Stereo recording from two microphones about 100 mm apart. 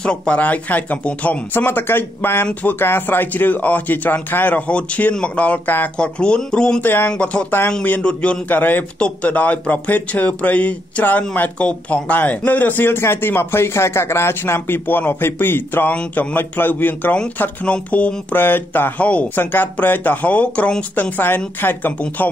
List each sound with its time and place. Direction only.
0.0 s a man's voice: 10° left (ahead or behind)
6.8 s a man's voice: 20° left (ahead or behind)